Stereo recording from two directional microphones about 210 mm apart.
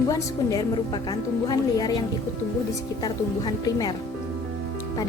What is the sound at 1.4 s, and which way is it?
A woman's voice, 20° left (ahead or behind).